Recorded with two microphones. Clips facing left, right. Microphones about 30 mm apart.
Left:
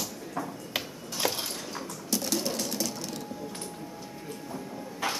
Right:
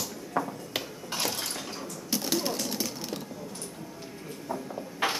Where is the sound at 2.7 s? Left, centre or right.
Centre.